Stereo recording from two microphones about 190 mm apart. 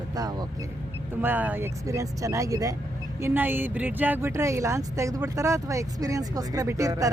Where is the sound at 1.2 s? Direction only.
10° right (ahead or behind).